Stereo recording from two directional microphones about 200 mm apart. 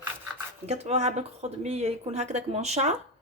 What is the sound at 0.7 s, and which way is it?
A woman's voice, 35° right (ahead or behind).